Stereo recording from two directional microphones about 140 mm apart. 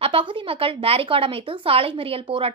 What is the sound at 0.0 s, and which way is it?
A woman's voice, 40° right (ahead or behind).